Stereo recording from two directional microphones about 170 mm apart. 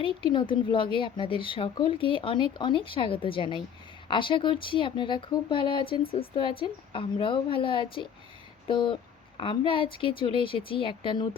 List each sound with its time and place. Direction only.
0.0 s a woman's voice: 30° left (ahead or behind)